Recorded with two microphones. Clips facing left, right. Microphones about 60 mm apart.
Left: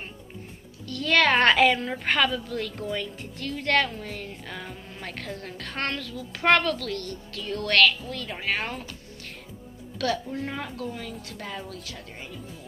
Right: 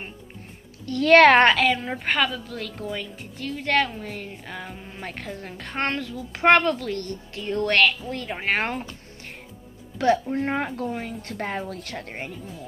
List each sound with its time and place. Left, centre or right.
0.8 s speech: right
1.5 s a woman's voice: centre; by 8.8 s right
9.9 s speech: right